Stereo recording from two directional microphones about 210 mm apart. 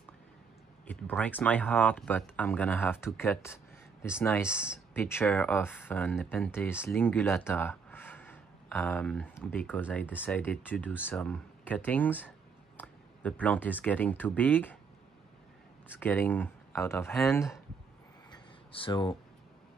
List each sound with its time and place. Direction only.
0.8 s speech: 5° left (ahead or behind)
4.5 s speech: 5° right (ahead or behind)
4.9 s speech: 10° left (ahead or behind)
15.9 s speech: 10° left (ahead or behind)
18.3 s a sound: 25° left (ahead or behind)